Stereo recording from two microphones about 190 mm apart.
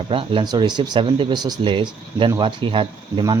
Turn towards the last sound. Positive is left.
turn(degrees=-25)  # may be behind; listen again after turning